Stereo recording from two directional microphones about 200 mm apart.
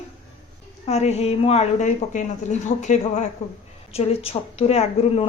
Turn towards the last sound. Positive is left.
turn(degrees=30)  # may be behind; listen again after turning